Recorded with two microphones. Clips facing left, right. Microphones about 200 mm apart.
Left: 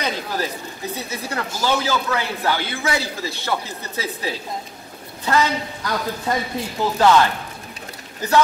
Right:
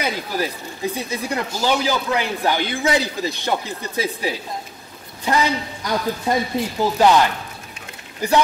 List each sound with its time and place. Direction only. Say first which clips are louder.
0.0 s speech: right 1 dB; 10° right (ahead or behind)